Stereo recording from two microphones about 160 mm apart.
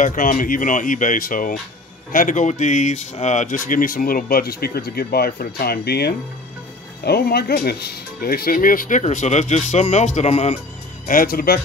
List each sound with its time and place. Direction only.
0.0 s speech: 55° left (ahead or behind)
2.1 s speech: 50° left (ahead or behind)
11.1 s speech: 65° left (ahead or behind)